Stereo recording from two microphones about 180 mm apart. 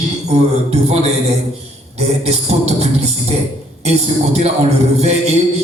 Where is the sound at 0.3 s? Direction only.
35° right (ahead or behind).